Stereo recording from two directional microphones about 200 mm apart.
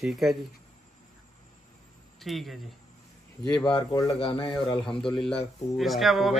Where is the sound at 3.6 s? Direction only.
20° left (ahead or behind).